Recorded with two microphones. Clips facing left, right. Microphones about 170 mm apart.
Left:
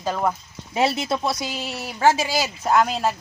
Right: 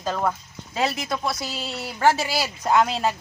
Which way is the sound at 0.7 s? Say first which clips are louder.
Left 4 dB; 25° left (ahead or behind).